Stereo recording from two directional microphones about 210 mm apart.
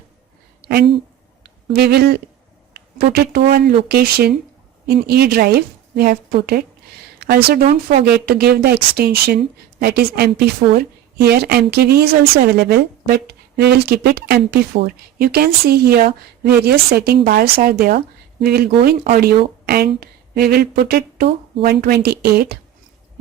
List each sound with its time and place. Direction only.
1.5 s a woman's voice: 50° right (ahead or behind)